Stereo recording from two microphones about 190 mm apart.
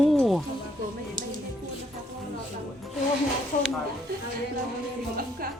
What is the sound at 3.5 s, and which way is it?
Speech, 45° left (ahead or behind).